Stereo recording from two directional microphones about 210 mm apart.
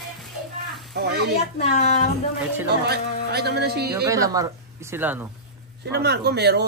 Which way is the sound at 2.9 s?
50° right (ahead or behind).